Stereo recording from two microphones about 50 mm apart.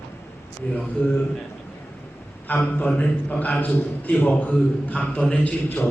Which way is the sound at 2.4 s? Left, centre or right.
Left.